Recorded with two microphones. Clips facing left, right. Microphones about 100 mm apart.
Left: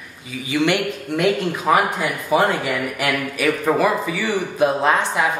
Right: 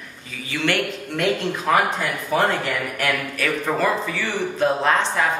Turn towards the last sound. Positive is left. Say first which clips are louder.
# left 2 dB
turn(degrees=15)  # may be behind; listen again after turning